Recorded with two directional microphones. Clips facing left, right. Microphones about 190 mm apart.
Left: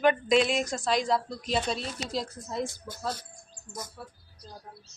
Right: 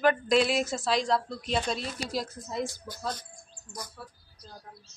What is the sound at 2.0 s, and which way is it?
Speech, 25° left (ahead or behind).